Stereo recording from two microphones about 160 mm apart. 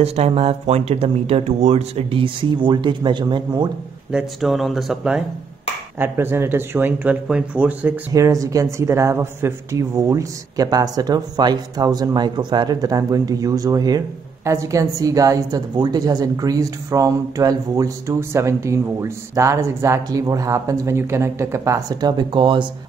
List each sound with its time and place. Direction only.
0.0 s speech: 40° right (ahead or behind)
4.1 s speech: centre (ahead or behind)
5.9 s speech: 15° right (ahead or behind)
8.1 s speech: 20° right (ahead or behind)